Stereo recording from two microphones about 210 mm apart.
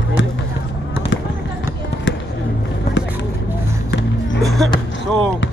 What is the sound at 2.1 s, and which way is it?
Music, 60° left (ahead or behind).